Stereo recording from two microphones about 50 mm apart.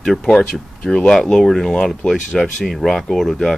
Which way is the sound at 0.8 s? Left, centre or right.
Left.